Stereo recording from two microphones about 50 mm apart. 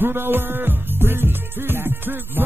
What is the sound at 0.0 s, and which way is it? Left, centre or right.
Music, right.